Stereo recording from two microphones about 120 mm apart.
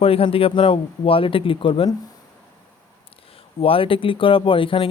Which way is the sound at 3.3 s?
50° left (ahead or behind).